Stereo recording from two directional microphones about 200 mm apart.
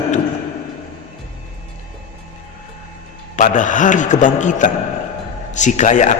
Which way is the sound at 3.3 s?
40° left (ahead or behind).